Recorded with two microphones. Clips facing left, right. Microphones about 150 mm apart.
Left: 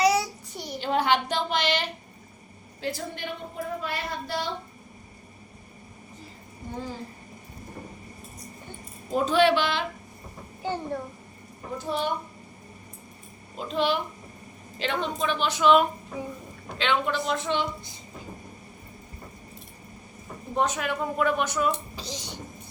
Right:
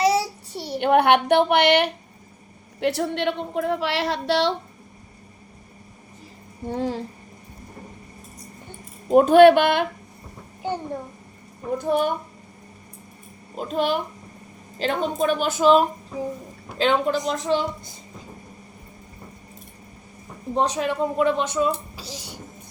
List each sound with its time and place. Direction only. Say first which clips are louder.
0.0 s child singing: right 2 dB; 30° right (ahead or behind)
0.8 s a woman's voice: right 7 dB; 60° right (ahead or behind); by 4.5 s 75° right (ahead or behind)
6.7 s a woman's voice: right 9 dB; 75° right (ahead or behind)
9.1 s a woman's voice: right 10 dB; 55° right (ahead or behind)
11.8 s a child's voice: right 7 dB; 50° right (ahead or behind)
13.7 s a child's voice: right 2 dB; 45° right (ahead or behind)
20.6 s a woman's voice: right 4 dB; 30° right (ahead or behind)
21.9 s a child's voice: even; 5° right (ahead or behind)